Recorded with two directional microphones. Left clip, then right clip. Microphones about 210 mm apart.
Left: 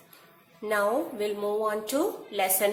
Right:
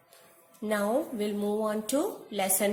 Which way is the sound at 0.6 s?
45° right (ahead or behind).